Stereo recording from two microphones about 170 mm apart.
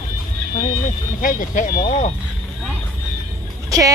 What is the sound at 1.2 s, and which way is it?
Speech, 50° left (ahead or behind).